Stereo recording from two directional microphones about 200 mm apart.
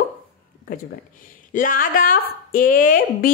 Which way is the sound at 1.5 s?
40° left (ahead or behind).